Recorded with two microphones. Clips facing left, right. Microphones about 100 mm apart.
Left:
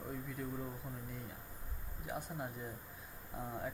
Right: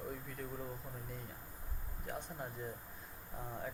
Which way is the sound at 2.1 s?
5° left (ahead or behind).